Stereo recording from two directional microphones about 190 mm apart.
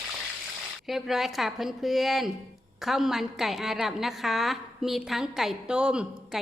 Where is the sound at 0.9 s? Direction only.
Centre (ahead or behind).